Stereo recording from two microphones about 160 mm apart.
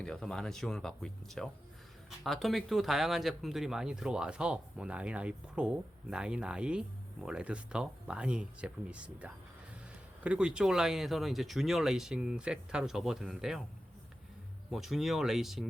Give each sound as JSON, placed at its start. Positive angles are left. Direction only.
{"t": 0.0, "sound": "speech", "side_deg": 5}
{"t": 14.7, "sound": "speech", "side_deg": 0}